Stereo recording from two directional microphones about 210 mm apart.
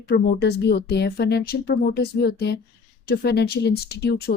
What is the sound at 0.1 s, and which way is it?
Speech, 50° left (ahead or behind).